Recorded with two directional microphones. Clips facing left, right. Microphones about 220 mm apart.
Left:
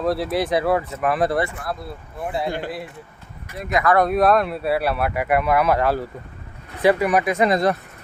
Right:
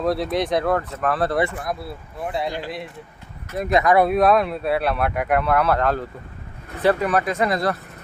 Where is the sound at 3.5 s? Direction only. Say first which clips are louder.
Right 4 dB; 35° right (ahead or behind).